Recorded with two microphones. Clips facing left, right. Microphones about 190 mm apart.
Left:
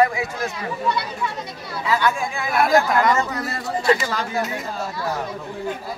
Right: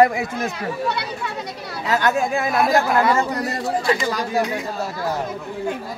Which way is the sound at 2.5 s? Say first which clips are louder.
Left 2 dB; 5° right (ahead or behind).